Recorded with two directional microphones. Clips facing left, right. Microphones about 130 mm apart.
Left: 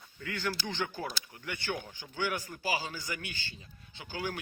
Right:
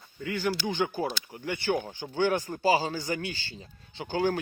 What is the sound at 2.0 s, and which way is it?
A man's voice, 35° right (ahead or behind).